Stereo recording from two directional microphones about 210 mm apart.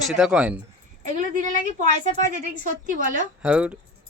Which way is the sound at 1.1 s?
35° right (ahead or behind).